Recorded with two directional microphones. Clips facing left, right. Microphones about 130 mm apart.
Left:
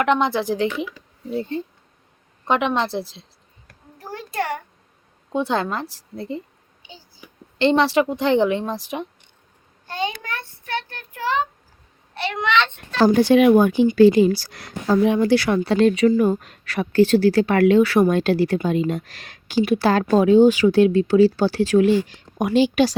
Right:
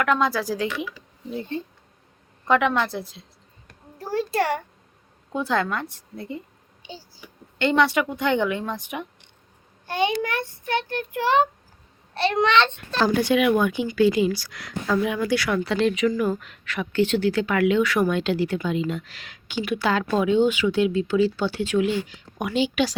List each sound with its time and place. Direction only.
0.0 s a woman's voice: 25° left (ahead or behind)
2.5 s a woman's voice: 20° left (ahead or behind)
4.1 s a sound: 30° right (ahead or behind)
5.3 s a woman's voice: 25° left (ahead or behind)
7.6 s speech: 30° left (ahead or behind)
9.8 s a child's voice: 20° right (ahead or behind)
12.1 s a sound: 30° right (ahead or behind)
13.1 s speech: 35° left (ahead or behind)